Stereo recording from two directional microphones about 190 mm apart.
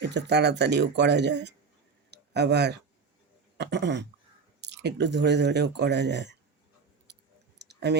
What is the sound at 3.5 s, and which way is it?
Speech, 65° right (ahead or behind).